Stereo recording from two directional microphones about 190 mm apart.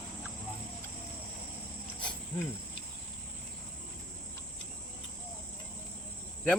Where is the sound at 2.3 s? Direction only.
15° left (ahead or behind).